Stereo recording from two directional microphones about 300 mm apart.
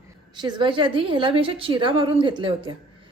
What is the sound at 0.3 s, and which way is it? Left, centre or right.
A woman's voice, centre.